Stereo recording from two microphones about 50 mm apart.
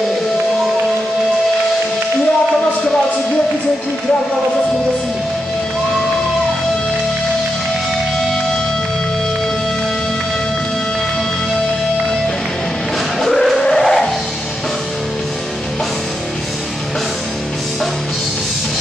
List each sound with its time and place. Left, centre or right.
13.2 s music: centre